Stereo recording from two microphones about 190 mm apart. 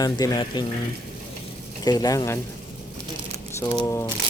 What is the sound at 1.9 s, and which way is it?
Speech, 20° left (ahead or behind).